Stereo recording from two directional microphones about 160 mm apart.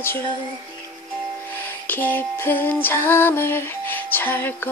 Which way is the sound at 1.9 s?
10° left (ahead or behind).